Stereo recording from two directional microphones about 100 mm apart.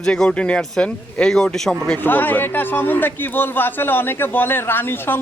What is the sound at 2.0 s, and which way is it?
A man's voice, 20° left (ahead or behind).